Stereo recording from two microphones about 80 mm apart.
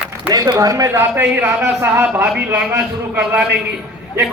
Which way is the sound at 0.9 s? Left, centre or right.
Right.